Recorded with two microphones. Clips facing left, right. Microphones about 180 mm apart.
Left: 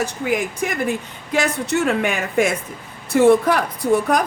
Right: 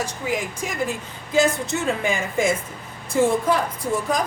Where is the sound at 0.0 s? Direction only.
60° left (ahead or behind).